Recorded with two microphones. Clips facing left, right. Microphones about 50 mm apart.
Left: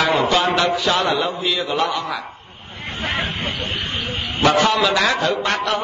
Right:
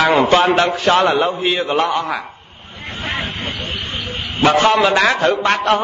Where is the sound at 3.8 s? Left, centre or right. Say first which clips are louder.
Even; left.